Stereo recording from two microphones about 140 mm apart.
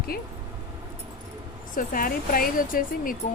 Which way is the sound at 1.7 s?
85° left.